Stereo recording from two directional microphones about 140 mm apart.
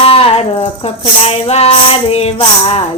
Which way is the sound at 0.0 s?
40° left (ahead or behind).